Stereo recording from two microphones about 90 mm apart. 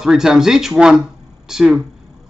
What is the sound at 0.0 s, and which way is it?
A man's voice, 5° right (ahead or behind).